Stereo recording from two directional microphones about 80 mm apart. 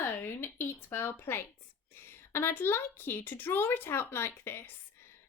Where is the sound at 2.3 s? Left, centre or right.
Left.